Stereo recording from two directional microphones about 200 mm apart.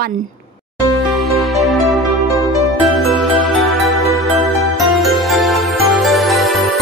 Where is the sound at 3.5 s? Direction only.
Centre (ahead or behind).